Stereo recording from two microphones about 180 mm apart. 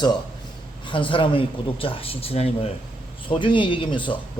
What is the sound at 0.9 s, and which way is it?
Speech, 30° left (ahead or behind).